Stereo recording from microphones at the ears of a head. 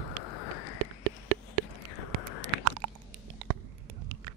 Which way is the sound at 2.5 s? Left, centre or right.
Right.